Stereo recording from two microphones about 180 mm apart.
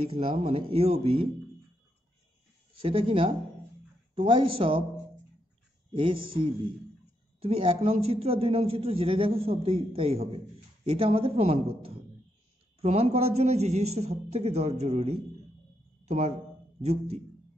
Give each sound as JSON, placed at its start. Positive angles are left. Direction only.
{"t": 0.0, "sound": "a man's voice", "side_deg": -30}
{"t": 2.7, "sound": "a man's voice", "side_deg": -30}
{"t": 5.9, "sound": "a man's voice", "side_deg": -30}